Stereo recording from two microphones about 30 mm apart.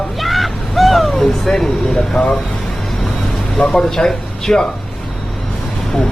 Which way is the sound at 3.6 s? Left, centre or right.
Centre.